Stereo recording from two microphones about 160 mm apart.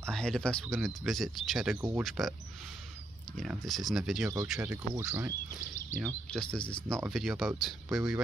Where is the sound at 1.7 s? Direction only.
15° right (ahead or behind).